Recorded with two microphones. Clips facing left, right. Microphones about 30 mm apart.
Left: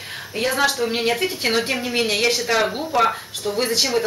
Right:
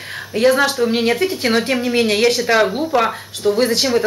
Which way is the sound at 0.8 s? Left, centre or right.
Centre.